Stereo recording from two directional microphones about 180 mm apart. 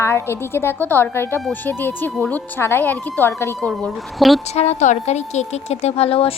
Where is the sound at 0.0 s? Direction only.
15° left (ahead or behind).